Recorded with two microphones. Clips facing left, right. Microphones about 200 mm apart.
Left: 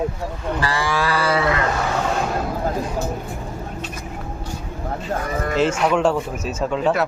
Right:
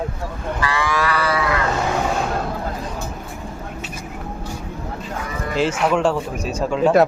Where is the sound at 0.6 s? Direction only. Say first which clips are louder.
Right 1 dB; 35° left (ahead or behind).